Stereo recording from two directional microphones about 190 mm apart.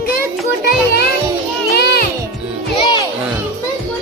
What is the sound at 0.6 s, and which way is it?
Music, 55° left (ahead or behind).